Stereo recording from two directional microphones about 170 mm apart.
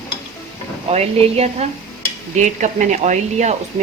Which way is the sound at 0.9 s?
40° right (ahead or behind).